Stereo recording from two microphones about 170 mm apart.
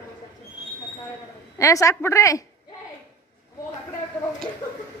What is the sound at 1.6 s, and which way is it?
Speech, 20° left (ahead or behind).